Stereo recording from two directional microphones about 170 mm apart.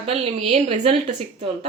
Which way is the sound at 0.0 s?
35° right (ahead or behind).